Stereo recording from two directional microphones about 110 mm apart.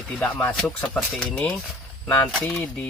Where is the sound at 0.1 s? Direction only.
15° left (ahead or behind).